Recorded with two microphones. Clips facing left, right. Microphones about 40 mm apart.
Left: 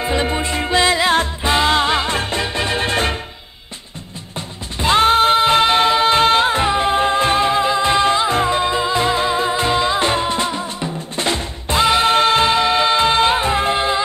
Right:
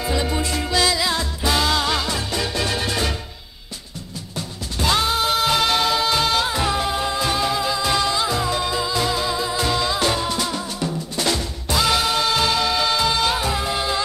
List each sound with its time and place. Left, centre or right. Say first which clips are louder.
0.0 s music: left 4 dB; left
4.4 s music: left 2 dB; left